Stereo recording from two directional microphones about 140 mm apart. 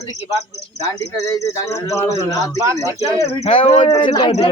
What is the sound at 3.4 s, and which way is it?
Speech, 45° left (ahead or behind).